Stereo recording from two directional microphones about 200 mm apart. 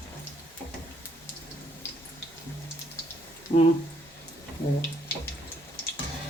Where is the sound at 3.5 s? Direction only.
25° left (ahead or behind).